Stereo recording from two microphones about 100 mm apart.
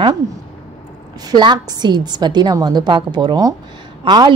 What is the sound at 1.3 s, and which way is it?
Speech, 45° right (ahead or behind).